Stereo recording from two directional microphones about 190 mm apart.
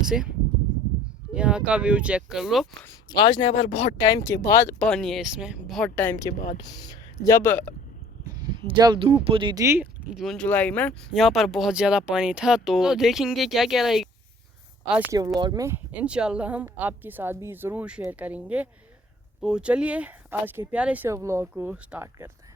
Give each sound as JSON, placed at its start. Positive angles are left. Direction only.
{"t": 0.0, "sound": "speech", "side_deg": -5}
{"t": 3.2, "sound": "speech", "side_deg": 25}
{"t": 4.0, "sound": "speech", "side_deg": 15}
{"t": 4.9, "sound": "speech", "side_deg": 0}
{"t": 8.5, "sound": "speech", "side_deg": -25}
{"t": 15.4, "sound": "speech", "side_deg": -20}